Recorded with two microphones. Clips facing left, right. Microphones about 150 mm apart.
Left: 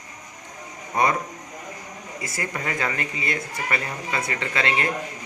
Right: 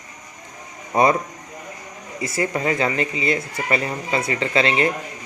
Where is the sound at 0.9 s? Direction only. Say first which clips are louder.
Right 5 dB; 25° right (ahead or behind).